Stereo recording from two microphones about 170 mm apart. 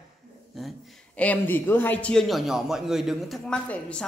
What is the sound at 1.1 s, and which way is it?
A man's voice, 10° left (ahead or behind).